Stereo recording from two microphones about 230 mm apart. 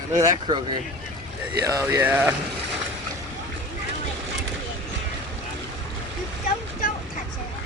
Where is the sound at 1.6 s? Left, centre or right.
Centre.